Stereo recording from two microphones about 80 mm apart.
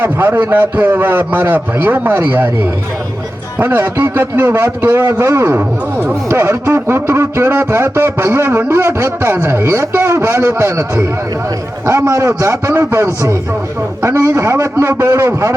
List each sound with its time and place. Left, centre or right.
0.0 s a man's voice: right
3.6 s a man's voice: right